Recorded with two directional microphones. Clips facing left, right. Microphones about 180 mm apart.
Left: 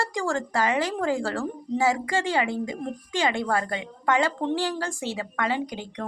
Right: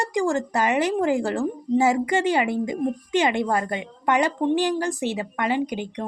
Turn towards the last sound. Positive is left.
turn(degrees=-15)  # may be behind; listen again after turning